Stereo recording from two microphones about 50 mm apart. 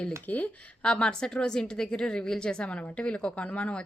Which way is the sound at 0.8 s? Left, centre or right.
Centre.